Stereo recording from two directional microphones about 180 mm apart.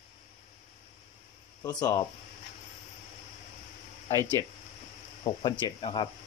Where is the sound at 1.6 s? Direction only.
20° left (ahead or behind).